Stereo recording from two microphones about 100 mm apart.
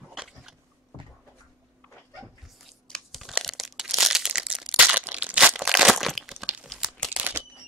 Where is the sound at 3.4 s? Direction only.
Centre (ahead or behind).